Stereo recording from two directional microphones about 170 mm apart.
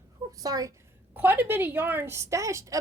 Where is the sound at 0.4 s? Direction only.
20° right (ahead or behind).